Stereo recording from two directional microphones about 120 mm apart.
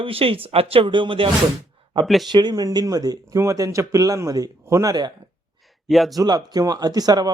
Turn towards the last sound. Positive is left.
turn(degrees=-35)  # may be behind; listen again after turning